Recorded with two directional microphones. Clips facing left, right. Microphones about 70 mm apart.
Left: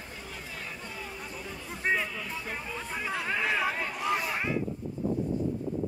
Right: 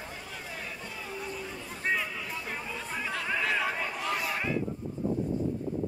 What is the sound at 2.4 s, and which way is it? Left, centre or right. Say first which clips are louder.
Speech: even; centre.